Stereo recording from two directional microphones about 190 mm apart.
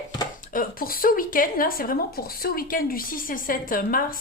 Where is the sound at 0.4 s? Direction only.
45° left (ahead or behind).